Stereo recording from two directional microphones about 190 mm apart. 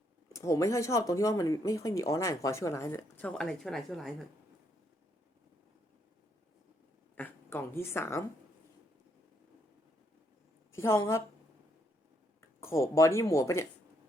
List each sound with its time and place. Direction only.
0.3 s speech: 15° left (ahead or behind); by 4.3 s centre (ahead or behind)
7.2 s a woman's voice: 10° left (ahead or behind)
10.8 s speech: 15° left (ahead or behind)
12.5 s speech: 15° left (ahead or behind)